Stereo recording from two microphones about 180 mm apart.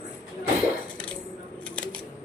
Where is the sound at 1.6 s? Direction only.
5° left (ahead or behind).